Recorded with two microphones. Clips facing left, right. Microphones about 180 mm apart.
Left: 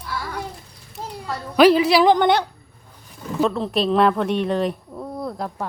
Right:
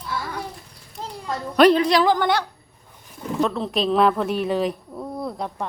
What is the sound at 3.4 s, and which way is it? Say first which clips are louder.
Speech: left 2 dB; centre (ahead or behind).